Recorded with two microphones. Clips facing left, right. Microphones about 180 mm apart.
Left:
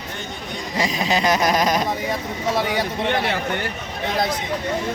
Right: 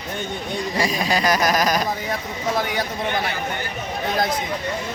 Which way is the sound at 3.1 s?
70° left (ahead or behind).